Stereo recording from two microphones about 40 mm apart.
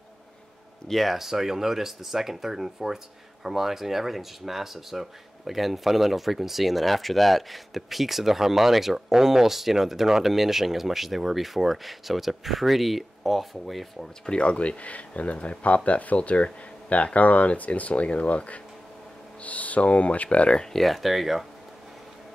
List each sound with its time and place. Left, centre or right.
0.8 s speech: centre
1.1 s speech: centre
14.4 s speech: left
20.6 s speech: centre